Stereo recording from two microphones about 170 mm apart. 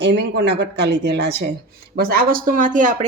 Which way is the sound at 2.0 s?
60° right (ahead or behind).